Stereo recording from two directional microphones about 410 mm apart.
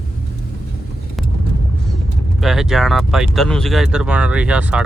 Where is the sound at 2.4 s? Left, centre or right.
Centre.